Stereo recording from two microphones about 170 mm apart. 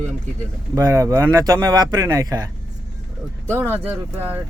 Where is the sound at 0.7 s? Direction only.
20° right (ahead or behind).